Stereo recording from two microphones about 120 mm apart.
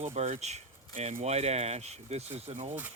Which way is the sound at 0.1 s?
70° right (ahead or behind).